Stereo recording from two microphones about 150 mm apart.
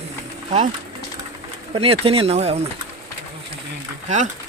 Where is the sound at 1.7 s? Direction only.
40° right (ahead or behind).